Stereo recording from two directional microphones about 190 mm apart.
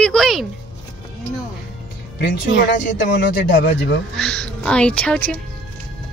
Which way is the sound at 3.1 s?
60° left (ahead or behind).